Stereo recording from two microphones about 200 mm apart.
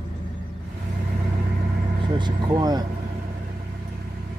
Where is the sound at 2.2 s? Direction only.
20° right (ahead or behind).